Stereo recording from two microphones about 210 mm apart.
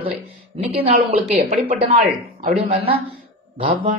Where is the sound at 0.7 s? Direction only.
25° right (ahead or behind).